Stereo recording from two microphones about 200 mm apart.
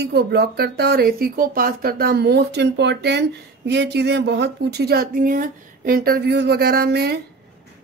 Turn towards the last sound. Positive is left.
turn(degrees=-55)  # may be behind; listen again after turning